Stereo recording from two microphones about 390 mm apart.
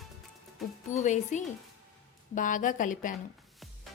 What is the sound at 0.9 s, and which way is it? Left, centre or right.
A woman's voice, centre.